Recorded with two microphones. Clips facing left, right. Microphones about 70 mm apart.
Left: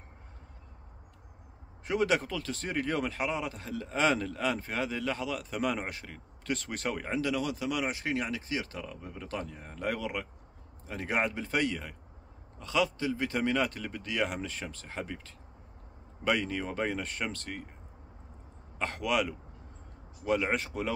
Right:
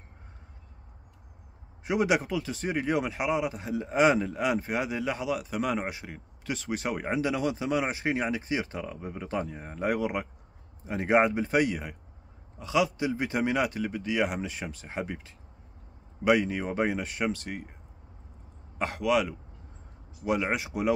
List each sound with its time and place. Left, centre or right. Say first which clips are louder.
1.9 s speech: right 3 dB; centre
18.8 s a man's voice: right 4 dB; centre
20.2 s speech: right 1 dB; centre